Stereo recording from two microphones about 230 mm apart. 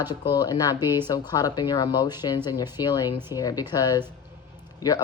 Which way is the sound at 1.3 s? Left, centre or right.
Centre.